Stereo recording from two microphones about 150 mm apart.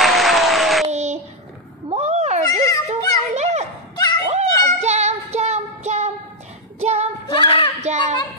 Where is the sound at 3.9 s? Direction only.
25° left (ahead or behind).